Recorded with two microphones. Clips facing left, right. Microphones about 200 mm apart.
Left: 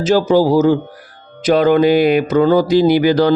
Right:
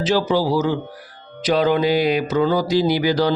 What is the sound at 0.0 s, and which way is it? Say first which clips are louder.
Mantra: left 6 dB; 45° left (ahead or behind).